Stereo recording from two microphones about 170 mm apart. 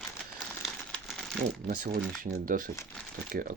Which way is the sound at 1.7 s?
55° right (ahead or behind).